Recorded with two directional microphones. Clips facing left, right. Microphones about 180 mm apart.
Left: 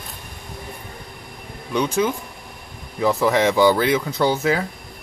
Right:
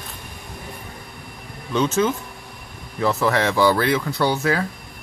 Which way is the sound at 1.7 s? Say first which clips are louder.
Right 1 dB; 15° left (ahead or behind).